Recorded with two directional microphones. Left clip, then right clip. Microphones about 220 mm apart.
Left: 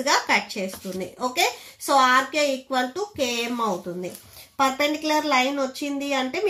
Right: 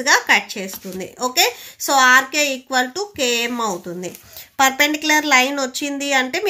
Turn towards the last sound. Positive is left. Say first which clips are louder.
# right 6 dB
turn(degrees=-40)  # may be behind; listen again after turning